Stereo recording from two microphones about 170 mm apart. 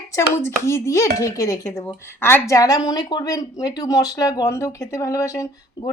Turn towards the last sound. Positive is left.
turn(degrees=20)  # may be behind; listen again after turning